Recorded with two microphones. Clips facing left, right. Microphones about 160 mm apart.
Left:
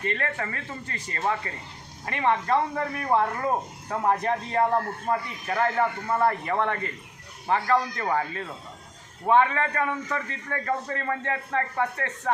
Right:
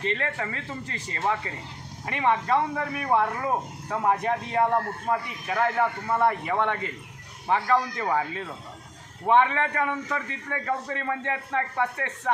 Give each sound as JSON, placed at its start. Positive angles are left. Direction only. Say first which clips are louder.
{"t": 0.0, "sound": "a man's voice", "louder": "right 1 dB", "side_deg": -20}